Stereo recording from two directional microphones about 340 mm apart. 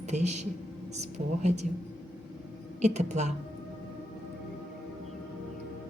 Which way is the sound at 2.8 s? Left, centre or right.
Centre.